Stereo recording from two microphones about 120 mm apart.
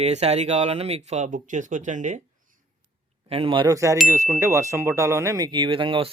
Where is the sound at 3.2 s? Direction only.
55° right (ahead or behind).